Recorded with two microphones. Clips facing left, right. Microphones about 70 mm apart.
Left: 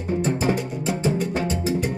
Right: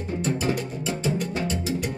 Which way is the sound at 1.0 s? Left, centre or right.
Left.